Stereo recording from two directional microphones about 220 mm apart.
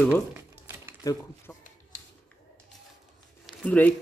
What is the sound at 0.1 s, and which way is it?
Crumpling, 10° right (ahead or behind).